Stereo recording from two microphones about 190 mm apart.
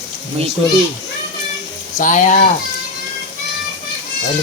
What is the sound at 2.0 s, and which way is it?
Speech, 40° left (ahead or behind).